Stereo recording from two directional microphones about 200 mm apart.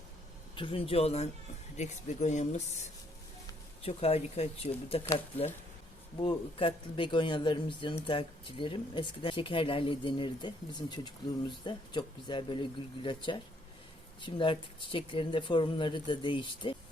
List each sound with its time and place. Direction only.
0.5 s speech: 25° left (ahead or behind)
3.8 s speech: 30° left (ahead or behind)